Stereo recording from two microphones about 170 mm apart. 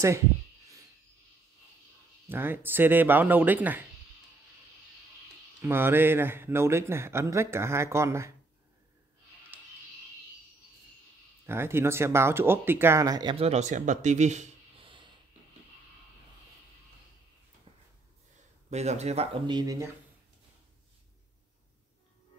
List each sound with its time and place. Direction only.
2.2 s speech: 10° right (ahead or behind)
5.6 s speech: 15° right (ahead or behind)
11.4 s speech: 15° right (ahead or behind); by 14.9 s 45° right (ahead or behind)
18.7 s speech: 40° right (ahead or behind); by 19.9 s 20° right (ahead or behind)